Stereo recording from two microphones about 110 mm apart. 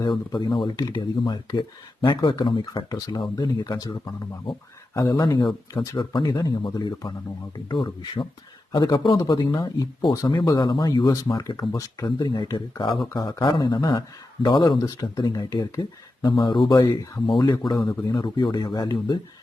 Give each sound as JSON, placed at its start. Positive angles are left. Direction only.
{"t": 0.3, "sound": "speech", "side_deg": 45}
{"t": 9.1, "sound": "speech", "side_deg": 35}
{"t": 11.3, "sound": "speech", "side_deg": 40}
{"t": 11.7, "sound": "speech", "side_deg": 30}
{"t": 12.0, "sound": "speech", "side_deg": 45}
{"t": 14.8, "sound": "speech", "side_deg": 35}